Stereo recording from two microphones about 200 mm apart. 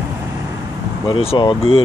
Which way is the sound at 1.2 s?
25° left (ahead or behind).